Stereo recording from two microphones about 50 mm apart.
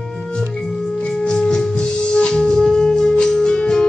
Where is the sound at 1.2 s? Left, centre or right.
Centre.